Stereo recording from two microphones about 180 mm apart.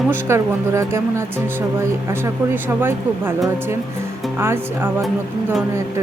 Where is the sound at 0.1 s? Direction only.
15° right (ahead or behind).